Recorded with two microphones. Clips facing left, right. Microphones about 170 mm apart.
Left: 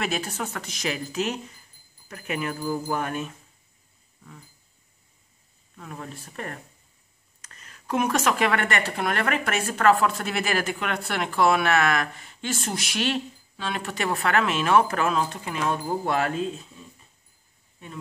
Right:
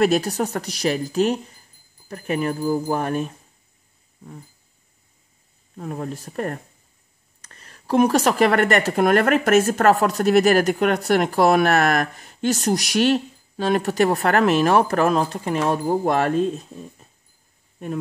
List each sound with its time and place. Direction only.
0.0 s speech: 40° right (ahead or behind)
4.2 s a sound: 35° right (ahead or behind)
5.8 s speech: 40° right (ahead or behind)